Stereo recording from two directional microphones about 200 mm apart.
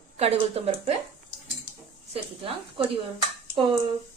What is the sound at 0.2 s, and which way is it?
Speech, 30° right (ahead or behind).